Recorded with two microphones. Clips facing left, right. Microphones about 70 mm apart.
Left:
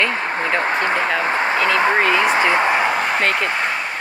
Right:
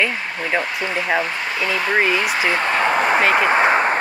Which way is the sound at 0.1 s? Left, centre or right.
Left.